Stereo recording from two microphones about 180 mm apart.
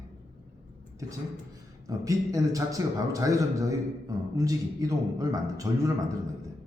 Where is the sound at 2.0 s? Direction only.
20° right (ahead or behind).